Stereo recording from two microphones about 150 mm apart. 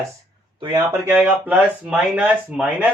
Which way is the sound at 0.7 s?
15° right (ahead or behind).